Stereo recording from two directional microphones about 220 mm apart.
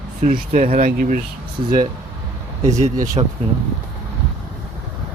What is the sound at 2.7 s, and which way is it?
Speech, 30° right (ahead or behind).